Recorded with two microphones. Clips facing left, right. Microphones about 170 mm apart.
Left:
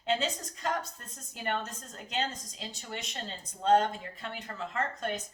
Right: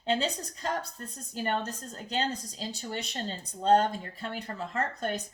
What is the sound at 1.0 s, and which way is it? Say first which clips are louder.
A woman's voice: right 5 dB; 35° right (ahead or behind).